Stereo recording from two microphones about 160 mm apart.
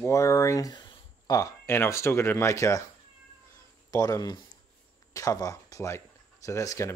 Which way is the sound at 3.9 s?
25° left (ahead or behind).